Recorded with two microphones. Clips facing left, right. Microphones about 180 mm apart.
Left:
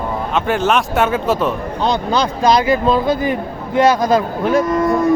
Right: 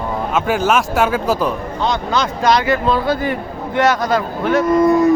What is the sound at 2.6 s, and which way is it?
Speech, 25° left (ahead or behind).